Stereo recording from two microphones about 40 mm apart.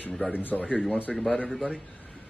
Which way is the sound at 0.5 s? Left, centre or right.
Centre.